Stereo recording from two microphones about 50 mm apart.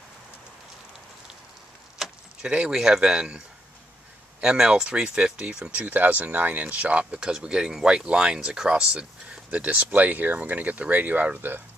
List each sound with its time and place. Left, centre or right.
2.4 s speech: right
7.2 s speech: centre; by 11.6 s right